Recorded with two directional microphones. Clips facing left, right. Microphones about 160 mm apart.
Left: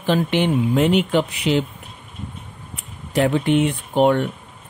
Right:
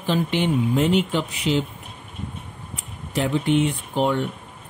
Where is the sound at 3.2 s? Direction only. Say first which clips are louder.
Left 3 dB; 65° left (ahead or behind).